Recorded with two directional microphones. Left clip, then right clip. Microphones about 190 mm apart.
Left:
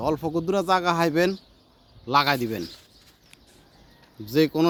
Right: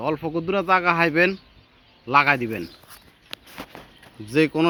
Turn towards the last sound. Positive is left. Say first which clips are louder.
# right 1 dB
turn(degrees=0)  # may be behind; listen again after turning